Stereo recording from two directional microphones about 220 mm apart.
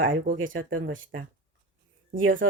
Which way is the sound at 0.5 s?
60° right (ahead or behind).